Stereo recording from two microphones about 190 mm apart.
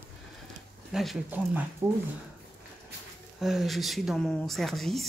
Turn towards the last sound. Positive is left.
turn(degrees=0)  # may be behind; listen again after turning